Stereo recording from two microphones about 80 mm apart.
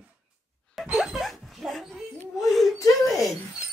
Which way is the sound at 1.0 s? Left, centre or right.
Centre.